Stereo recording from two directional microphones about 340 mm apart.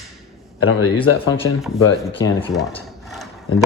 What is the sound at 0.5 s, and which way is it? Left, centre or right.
Speech, left.